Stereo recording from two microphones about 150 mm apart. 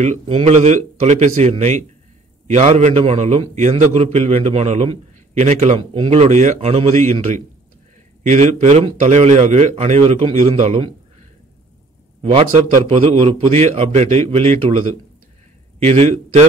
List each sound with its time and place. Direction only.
0.0 s a man's voice: 45° right (ahead or behind)
5.8 s a man's voice: 40° right (ahead or behind)
12.2 s a man's voice: 45° right (ahead or behind)
15.8 s a man's voice: 45° right (ahead or behind)